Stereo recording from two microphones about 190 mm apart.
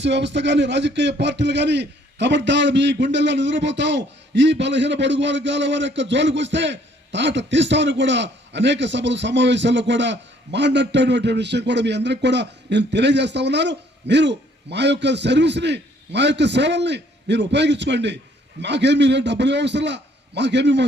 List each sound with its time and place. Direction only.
0.0 s a man's voice: 65° right (ahead or behind)